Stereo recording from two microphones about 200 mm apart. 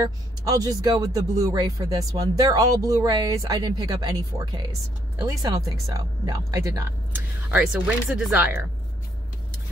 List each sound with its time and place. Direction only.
0.0 s speech: 20° right (ahead or behind)